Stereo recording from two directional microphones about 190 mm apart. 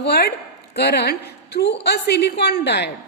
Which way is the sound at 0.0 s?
55° left (ahead or behind).